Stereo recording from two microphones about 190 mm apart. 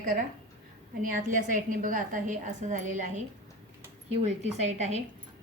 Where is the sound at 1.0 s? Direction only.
40° right (ahead or behind).